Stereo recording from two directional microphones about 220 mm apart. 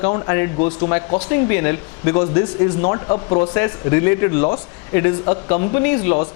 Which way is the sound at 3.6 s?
15° left (ahead or behind).